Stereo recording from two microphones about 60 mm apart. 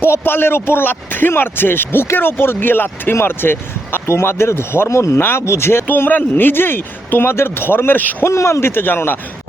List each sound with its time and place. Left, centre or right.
0.0 s speech: left
5.1 s speech: left
5.9 s speech: left
8.3 s speech: left